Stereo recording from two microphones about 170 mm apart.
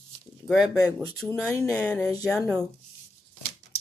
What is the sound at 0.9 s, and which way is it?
Speech, centre (ahead or behind).